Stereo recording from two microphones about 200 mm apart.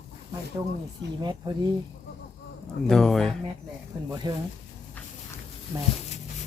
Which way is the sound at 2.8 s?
5° left (ahead or behind).